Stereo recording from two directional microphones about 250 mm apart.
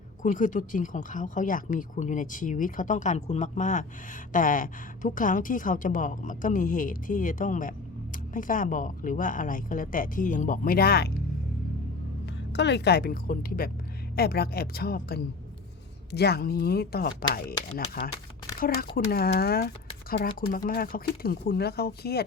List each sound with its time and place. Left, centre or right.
0.2 s speech: left
12.5 s speech: left